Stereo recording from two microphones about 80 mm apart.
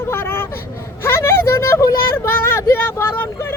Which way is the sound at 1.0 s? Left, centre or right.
Left.